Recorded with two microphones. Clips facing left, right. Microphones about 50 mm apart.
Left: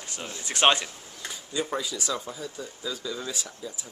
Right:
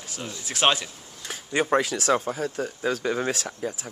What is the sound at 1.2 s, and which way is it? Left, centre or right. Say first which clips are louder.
Speech: right 7 dB; right.